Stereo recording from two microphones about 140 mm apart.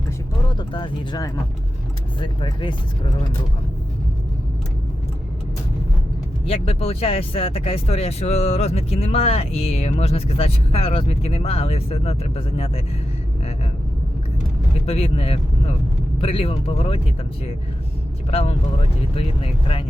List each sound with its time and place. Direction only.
0.5 s speech: 35° left (ahead or behind)
6.4 s speech: 45° left (ahead or behind)
14.8 s speech: 45° left (ahead or behind)
18.3 s speech: 45° left (ahead or behind)